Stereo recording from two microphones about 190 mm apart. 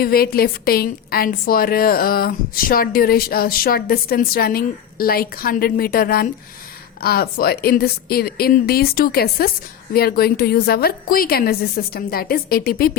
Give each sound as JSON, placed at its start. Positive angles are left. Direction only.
{"t": 0.0, "sound": "a woman's voice", "side_deg": 55}